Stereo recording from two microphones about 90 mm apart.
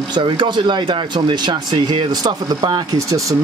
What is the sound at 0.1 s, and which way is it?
Speech, 55° right (ahead or behind).